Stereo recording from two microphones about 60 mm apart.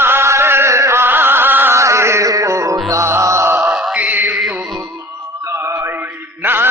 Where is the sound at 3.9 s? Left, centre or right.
Right.